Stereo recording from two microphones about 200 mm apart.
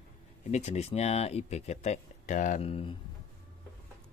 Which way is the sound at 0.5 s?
35° left (ahead or behind).